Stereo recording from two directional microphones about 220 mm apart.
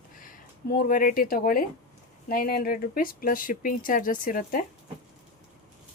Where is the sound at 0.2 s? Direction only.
40° left (ahead or behind).